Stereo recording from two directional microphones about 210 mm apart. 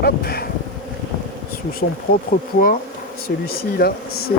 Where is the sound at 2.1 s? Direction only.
45° left (ahead or behind).